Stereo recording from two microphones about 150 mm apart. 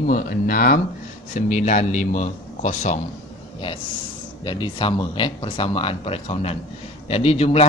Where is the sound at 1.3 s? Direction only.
55° left (ahead or behind).